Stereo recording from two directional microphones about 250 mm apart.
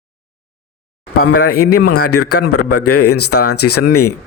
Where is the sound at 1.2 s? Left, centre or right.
Left.